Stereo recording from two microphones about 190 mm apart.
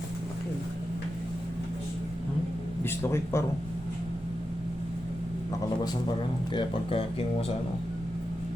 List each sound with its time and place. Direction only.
3.0 s speech: 15° left (ahead or behind)
6.5 s speech: 25° left (ahead or behind)